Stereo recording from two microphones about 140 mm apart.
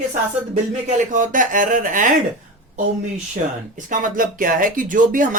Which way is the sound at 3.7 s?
70° right (ahead or behind).